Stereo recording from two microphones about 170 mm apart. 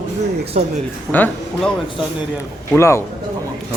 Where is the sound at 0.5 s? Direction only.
45° right (ahead or behind).